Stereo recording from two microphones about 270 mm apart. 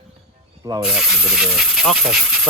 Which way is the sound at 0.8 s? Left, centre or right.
Centre.